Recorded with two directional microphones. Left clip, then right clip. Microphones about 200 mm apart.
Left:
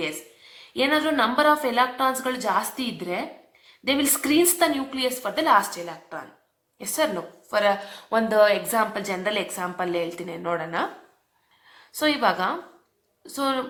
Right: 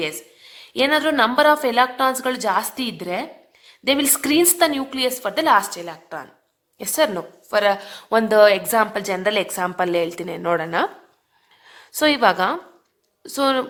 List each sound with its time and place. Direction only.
0.0 s a woman's voice: 55° right (ahead or behind)